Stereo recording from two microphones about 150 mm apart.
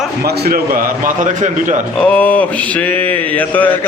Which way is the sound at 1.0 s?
55° right (ahead or behind).